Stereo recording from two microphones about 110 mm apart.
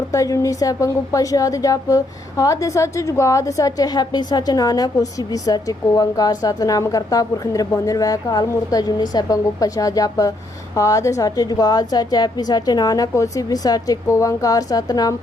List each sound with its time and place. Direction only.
0.1 s a woman's voice: 30° left (ahead or behind)